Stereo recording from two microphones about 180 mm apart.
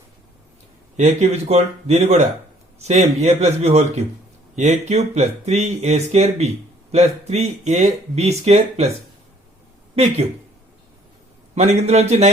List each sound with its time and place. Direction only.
0.9 s speech: 40° right (ahead or behind)
9.9 s speech: 35° right (ahead or behind)
11.5 s speech: 40° right (ahead or behind)